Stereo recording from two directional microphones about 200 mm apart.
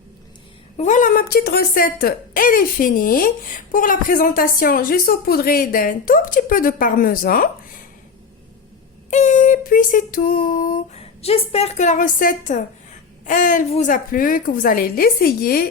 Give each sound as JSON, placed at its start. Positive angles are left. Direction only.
{"t": 0.8, "sound": "speech", "side_deg": 40}
{"t": 9.0, "sound": "a sound", "side_deg": 35}
{"t": 13.2, "sound": "speech", "side_deg": 40}